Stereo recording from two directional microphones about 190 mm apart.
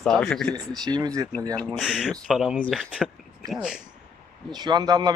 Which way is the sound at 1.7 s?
5° right (ahead or behind).